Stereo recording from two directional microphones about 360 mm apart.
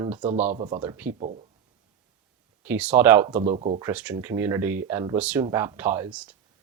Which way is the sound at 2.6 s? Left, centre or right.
Centre.